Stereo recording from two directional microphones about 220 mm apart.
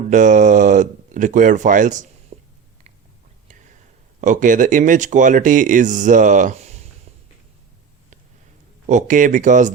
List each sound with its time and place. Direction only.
0.1 s speech: 35° right (ahead or behind)
2.3 s a sound: 25° right (ahead or behind)
4.2 s speech: 35° right (ahead or behind)
8.9 s speech: 35° right (ahead or behind)